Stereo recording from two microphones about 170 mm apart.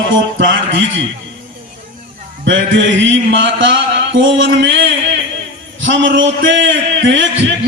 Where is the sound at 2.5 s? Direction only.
90° right.